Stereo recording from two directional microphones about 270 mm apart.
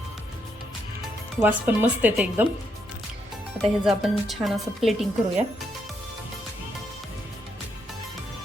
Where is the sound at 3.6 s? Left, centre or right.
Centre.